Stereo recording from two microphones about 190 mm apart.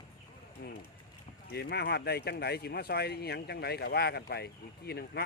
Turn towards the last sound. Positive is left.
turn(degrees=55)  # may be behind; listen again after turning